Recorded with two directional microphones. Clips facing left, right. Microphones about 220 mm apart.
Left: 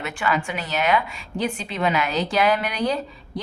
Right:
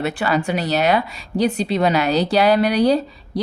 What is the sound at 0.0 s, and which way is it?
Speech, 35° right (ahead or behind).